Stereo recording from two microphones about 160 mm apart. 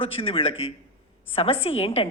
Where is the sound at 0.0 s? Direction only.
35° left (ahead or behind).